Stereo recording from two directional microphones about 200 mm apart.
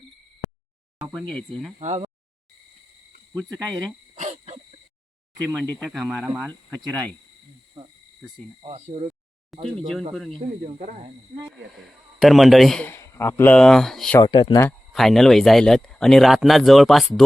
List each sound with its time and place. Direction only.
1.1 s speech: 5° left (ahead or behind)
1.8 s speech: 35° right (ahead or behind)
3.3 s speech: centre (ahead or behind)
4.2 s a sound: 35° right (ahead or behind)
5.5 s speech: centre (ahead or behind)
8.6 s speech: 30° right (ahead or behind)
9.5 s speech: centre (ahead or behind)
10.7 s speech: 35° right (ahead or behind)
12.2 s speech: centre (ahead or behind)
14.2 s speech: 25° left (ahead or behind)
14.9 s speech: centre (ahead or behind)